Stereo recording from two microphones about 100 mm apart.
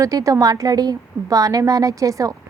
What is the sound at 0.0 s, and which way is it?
Speech, 35° right (ahead or behind).